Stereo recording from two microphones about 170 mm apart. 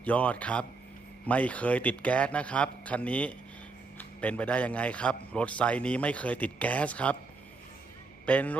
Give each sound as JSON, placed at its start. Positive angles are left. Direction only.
{"t": 0.0, "sound": "a man's voice", "side_deg": 10}
{"t": 8.3, "sound": "a man's voice", "side_deg": 10}